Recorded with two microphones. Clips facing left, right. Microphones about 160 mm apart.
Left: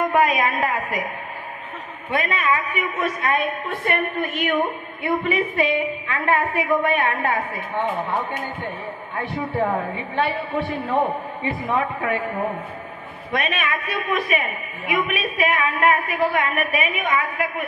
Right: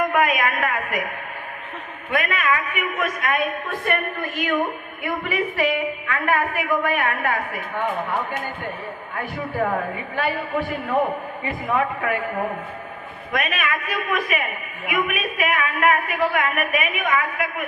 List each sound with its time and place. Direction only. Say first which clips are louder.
0.0 s a woman's voice: left 1 dB; 35° left (ahead or behind)
2.0 s a woman's voice: even; 30° left (ahead or behind)
9.1 s a woman's voice: left 2 dB; 25° left (ahead or behind)
13.3 s a woman's voice: left 1 dB; 30° left (ahead or behind)